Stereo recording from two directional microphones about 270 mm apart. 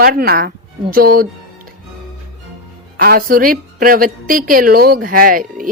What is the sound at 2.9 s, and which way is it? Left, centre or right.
A woman's voice, right.